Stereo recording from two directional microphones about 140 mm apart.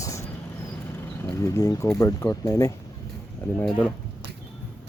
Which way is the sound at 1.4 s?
20° left (ahead or behind).